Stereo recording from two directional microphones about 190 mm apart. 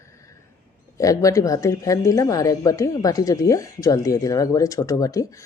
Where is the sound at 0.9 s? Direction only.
15° left (ahead or behind).